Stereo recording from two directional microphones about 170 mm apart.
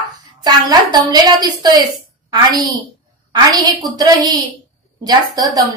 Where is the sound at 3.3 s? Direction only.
25° right (ahead or behind).